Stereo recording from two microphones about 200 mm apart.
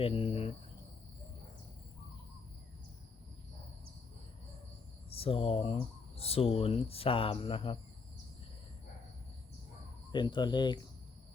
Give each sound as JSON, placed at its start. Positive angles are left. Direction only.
{"t": 0.0, "sound": "speech", "side_deg": 30}
{"t": 5.0, "sound": "speech", "side_deg": 30}
{"t": 10.1, "sound": "speech", "side_deg": 20}